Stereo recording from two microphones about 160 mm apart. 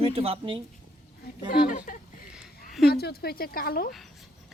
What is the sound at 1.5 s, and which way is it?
Speech, 60° left (ahead or behind).